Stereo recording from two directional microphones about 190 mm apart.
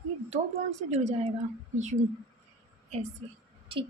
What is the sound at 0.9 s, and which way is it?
Speech, 35° right (ahead or behind).